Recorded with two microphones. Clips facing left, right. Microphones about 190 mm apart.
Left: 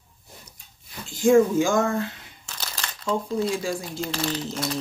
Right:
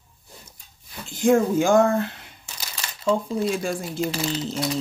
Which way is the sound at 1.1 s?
60° right (ahead or behind).